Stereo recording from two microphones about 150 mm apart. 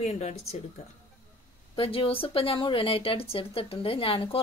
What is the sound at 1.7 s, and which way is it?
Speech, 40° left (ahead or behind).